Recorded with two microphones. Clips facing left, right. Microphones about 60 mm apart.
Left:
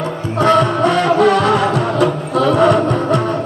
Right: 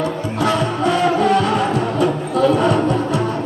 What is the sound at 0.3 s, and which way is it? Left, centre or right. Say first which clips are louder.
Music: left 7 dB; left.